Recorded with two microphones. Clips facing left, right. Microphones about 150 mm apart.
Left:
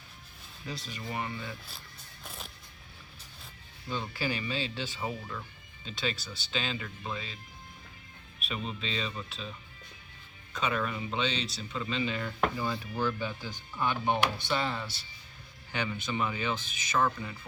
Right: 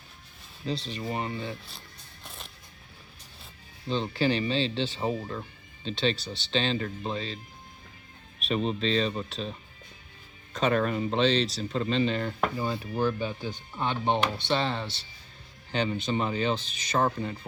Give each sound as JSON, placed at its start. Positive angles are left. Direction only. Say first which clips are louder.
{"t": 0.6, "sound": "speech", "louder": "right 8 dB", "side_deg": -30}
{"t": 3.8, "sound": "speech", "louder": "right 7 dB", "side_deg": -25}
{"t": 6.1, "sound": "speech", "louder": "right 6 dB", "side_deg": -70}
{"t": 6.5, "sound": "speech", "louder": "right 7 dB", "side_deg": -30}
{"t": 8.4, "sound": "speech", "louder": "right 10 dB", "side_deg": -35}
{"t": 12.5, "sound": "speech", "louder": "right 4 dB", "side_deg": -20}